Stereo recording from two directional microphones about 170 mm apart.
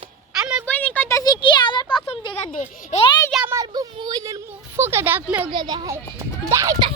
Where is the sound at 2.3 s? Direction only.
45° left (ahead or behind).